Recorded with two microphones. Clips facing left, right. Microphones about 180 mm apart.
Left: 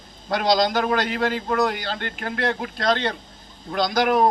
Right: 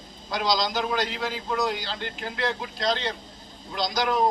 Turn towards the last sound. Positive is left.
turn(degrees=60)  # may be behind; listen again after turning